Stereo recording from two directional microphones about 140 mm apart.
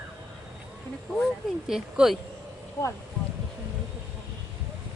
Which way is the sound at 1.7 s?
5° right (ahead or behind).